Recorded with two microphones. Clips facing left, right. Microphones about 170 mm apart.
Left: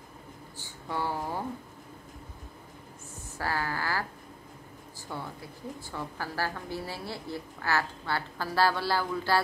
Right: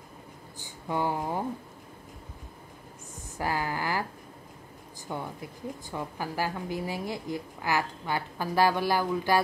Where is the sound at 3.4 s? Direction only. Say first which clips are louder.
Right 2 dB; 15° right (ahead or behind).